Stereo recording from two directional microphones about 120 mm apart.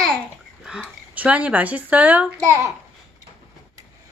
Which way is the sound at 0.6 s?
5° right (ahead or behind).